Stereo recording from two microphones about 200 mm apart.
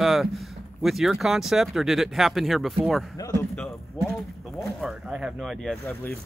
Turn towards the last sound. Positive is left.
turn(degrees=0)  # may be behind; listen again after turning